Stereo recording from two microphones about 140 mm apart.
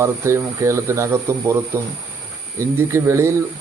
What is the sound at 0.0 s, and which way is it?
A man's voice, 20° right (ahead or behind).